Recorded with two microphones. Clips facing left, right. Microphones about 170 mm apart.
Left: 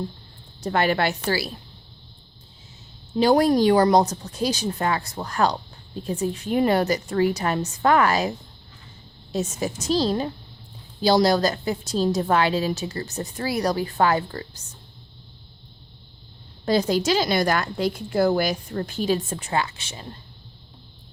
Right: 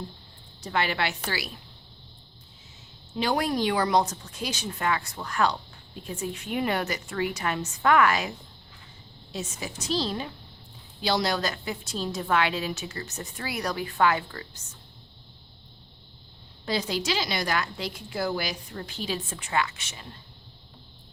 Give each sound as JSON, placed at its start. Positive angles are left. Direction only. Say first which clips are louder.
{"t": 0.6, "sound": "a woman's voice", "louder": "left 6 dB", "side_deg": 45}
{"t": 3.1, "sound": "a woman's voice", "louder": "left 9 dB", "side_deg": 35}
{"t": 9.3, "sound": "a woman's voice", "louder": "left 9 dB", "side_deg": 45}
{"t": 16.6, "sound": "a woman's voice", "louder": "left 8 dB", "side_deg": 45}